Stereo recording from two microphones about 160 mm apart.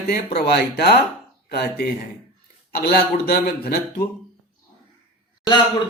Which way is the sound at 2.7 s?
80° left.